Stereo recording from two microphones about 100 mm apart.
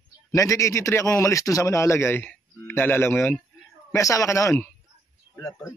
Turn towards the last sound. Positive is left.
turn(degrees=30)  # may be behind; listen again after turning